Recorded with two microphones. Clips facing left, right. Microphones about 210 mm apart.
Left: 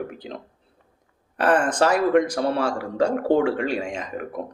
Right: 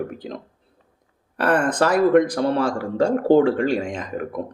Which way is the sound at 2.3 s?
45° right (ahead or behind).